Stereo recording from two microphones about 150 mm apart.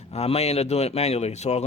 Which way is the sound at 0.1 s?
45° left (ahead or behind).